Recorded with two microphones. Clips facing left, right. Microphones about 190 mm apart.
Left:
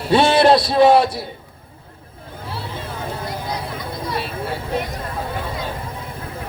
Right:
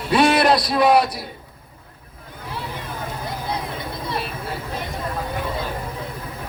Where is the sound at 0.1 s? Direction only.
25° left (ahead or behind).